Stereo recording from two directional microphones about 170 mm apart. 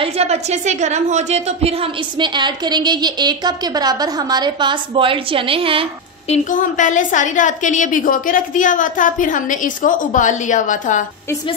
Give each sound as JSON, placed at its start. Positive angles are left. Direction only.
{"t": 0.0, "sound": "a woman's voice", "side_deg": -40}
{"t": 6.2, "sound": "a woman's voice", "side_deg": 45}